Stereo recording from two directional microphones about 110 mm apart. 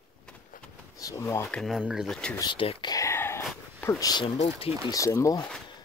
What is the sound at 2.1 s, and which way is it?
Speech, 10° left (ahead or behind).